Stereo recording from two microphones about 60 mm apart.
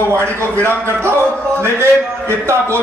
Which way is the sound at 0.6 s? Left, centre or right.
Right.